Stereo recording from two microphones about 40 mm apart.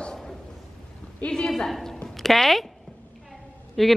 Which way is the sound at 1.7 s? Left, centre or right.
Centre.